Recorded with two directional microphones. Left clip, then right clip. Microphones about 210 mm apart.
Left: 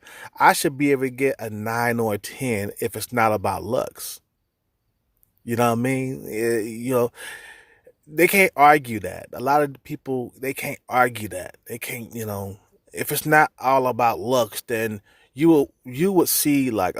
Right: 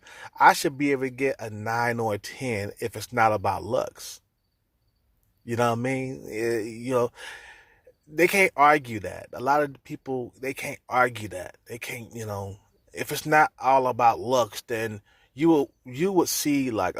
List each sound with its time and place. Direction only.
0.0 s speech: 40° left (ahead or behind)
5.5 s speech: 40° left (ahead or behind)